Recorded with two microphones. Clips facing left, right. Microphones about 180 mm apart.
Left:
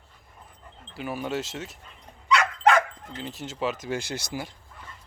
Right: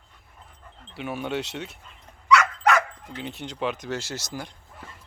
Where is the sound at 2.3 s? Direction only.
30° left (ahead or behind).